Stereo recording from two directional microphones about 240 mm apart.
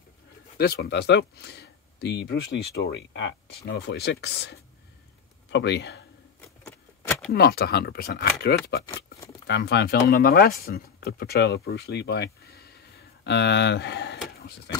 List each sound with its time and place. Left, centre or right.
0.6 s speech: left
6.6 s a sound: centre
7.3 s speech: left
8.8 s speech: centre
9.5 s speech: left